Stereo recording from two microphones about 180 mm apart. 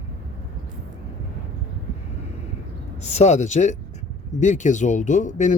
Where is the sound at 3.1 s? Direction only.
40° left (ahead or behind).